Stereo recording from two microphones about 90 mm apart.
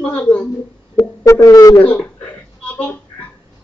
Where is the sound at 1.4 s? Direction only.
40° left (ahead or behind).